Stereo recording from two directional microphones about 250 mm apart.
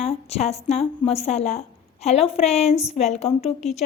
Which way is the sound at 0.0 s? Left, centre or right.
Left.